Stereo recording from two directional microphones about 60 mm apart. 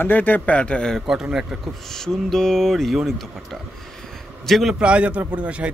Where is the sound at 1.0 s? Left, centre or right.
Centre.